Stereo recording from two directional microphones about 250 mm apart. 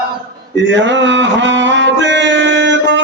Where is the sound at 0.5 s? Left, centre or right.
Right.